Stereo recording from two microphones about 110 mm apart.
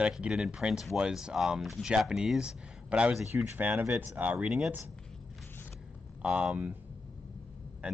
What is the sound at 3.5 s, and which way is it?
Speech, 15° right (ahead or behind).